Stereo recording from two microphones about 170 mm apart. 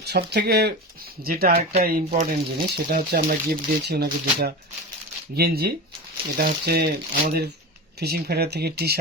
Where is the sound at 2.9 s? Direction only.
60° right (ahead or behind).